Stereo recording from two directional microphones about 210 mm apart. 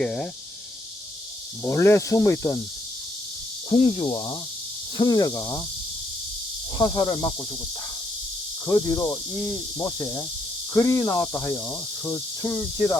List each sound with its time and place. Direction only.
0.0 s speech: 5° left (ahead or behind)
1.6 s cricket: 10° left (ahead or behind)
3.7 s speech: 25° left (ahead or behind)
4.9 s cricket: 20° left (ahead or behind)
6.7 s speech: 20° left (ahead or behind)
8.6 s cricket: 15° left (ahead or behind)